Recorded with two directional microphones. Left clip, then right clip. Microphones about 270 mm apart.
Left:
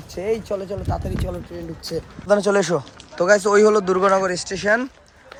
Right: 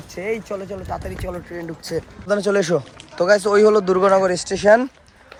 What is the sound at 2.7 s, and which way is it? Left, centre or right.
Speech, centre.